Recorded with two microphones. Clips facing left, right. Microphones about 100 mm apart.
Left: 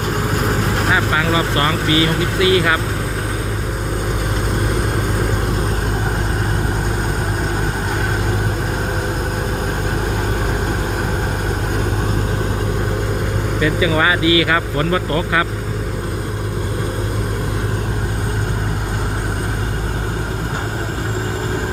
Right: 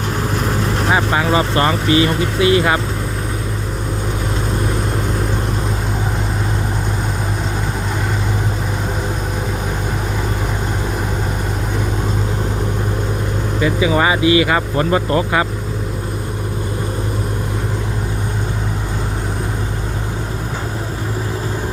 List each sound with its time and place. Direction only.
0.9 s speech: 25° right (ahead or behind)
13.6 s speech: 25° right (ahead or behind)